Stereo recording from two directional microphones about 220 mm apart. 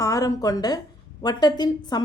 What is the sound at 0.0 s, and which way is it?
A woman's voice, 15° left (ahead or behind).